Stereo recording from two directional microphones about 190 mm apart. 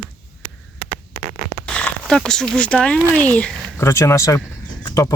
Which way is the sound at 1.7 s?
5° left (ahead or behind).